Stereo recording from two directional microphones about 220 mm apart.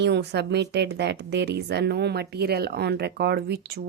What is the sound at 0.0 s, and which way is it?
A woman's voice, 50° right (ahead or behind).